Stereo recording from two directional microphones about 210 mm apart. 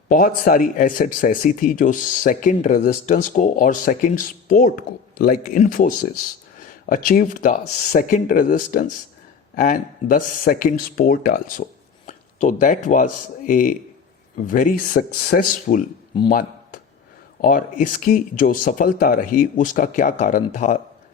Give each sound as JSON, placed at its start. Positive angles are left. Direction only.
{"t": 0.1, "sound": "speech", "side_deg": 40}
{"t": 17.4, "sound": "speech", "side_deg": 40}